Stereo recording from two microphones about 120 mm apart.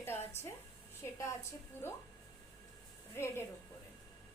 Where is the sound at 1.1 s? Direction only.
25° left (ahead or behind).